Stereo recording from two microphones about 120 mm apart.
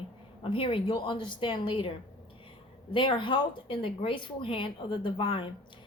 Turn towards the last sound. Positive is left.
turn(degrees=45)  # may be behind; listen again after turning